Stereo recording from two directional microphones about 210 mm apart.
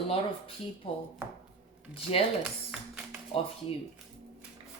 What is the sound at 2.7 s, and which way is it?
Speech, centre (ahead or behind).